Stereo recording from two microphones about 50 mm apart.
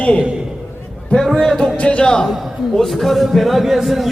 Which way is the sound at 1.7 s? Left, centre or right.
Left.